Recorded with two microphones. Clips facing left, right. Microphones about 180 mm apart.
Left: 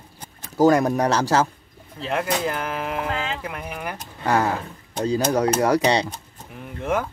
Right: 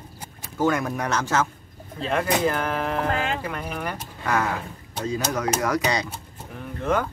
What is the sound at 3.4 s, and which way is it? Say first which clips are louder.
Speech: right 1 dB; 5° left (ahead or behind).